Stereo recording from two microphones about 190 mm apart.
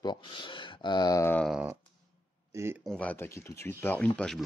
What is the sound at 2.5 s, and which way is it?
Speech, 15° right (ahead or behind).